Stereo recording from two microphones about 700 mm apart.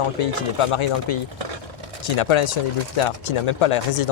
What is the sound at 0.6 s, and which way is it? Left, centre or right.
Speech, left.